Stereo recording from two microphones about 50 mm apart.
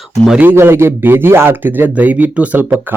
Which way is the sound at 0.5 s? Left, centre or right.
Right.